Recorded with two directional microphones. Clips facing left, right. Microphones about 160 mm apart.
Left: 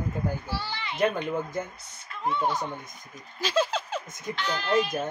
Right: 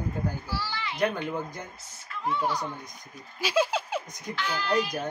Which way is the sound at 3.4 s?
10° right (ahead or behind).